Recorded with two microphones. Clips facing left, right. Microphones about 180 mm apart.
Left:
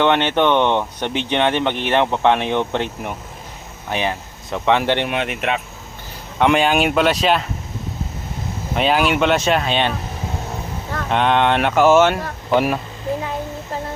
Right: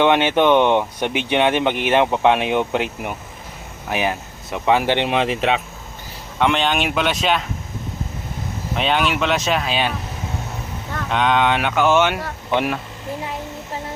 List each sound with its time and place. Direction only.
0.0 s speech: 10° right (ahead or behind)
5.0 s speech: 30° right (ahead or behind)
6.4 s speech: 5° left (ahead or behind)
8.7 s speech: centre (ahead or behind)
11.1 s speech: centre (ahead or behind)